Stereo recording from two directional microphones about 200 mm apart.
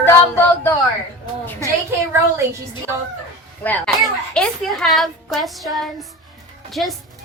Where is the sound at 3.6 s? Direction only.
5° left (ahead or behind).